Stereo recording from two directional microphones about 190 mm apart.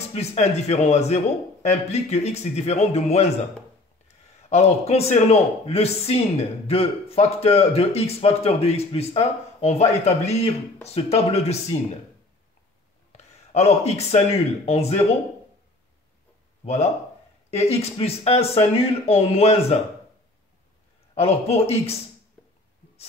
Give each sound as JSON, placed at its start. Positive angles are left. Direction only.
{"t": 0.1, "sound": "a man's voice", "side_deg": 35}
{"t": 4.5, "sound": "a man's voice", "side_deg": 35}
{"t": 13.1, "sound": "speech", "side_deg": 35}
{"t": 16.6, "sound": "a man's voice", "side_deg": 35}
{"t": 21.1, "sound": "a man's voice", "side_deg": 30}